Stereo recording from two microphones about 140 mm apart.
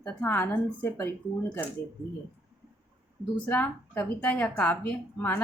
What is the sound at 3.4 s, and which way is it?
A woman's voice, 10° left (ahead or behind).